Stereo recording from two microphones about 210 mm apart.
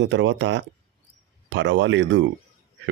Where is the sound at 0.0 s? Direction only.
60° right (ahead or behind).